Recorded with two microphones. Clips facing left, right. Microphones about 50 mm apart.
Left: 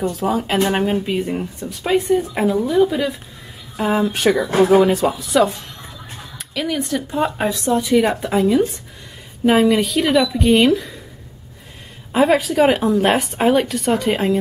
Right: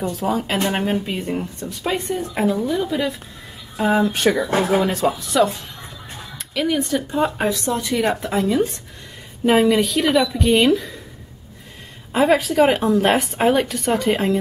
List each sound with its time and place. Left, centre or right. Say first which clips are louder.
0.1 s speech: left 2 dB; centre
12.1 s speech: left 1 dB; centre